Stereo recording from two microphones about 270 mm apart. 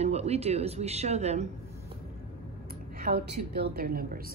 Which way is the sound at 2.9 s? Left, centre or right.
Right.